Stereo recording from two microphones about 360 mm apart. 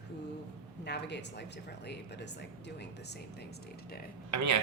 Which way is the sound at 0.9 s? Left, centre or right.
Left.